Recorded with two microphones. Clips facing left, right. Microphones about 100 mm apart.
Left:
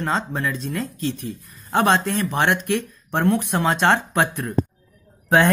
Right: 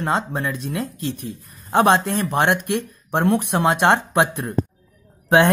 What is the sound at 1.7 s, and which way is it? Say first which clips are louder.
Speech: right 2 dB; 15° right (ahead or behind).